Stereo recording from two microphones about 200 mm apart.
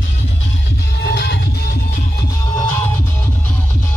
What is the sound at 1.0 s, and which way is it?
Music, 60° left (ahead or behind).